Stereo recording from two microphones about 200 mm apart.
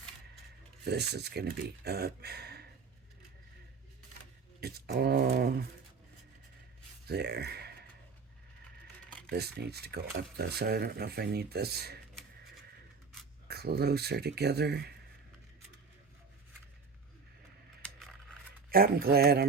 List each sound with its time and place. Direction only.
0.9 s speech: 55° right (ahead or behind)
4.6 s speech: 55° right (ahead or behind)
7.1 s speech: 55° right (ahead or behind)
9.3 s speech: 55° right (ahead or behind)
13.5 s speech: 55° right (ahead or behind)
17.8 s a sound: 5° left (ahead or behind)
18.7 s speech: 50° right (ahead or behind)